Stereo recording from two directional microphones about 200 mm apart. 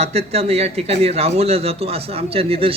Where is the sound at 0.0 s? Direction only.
30° right (ahead or behind).